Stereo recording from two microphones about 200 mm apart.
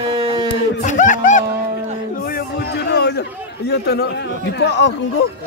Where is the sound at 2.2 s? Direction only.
50° left (ahead or behind).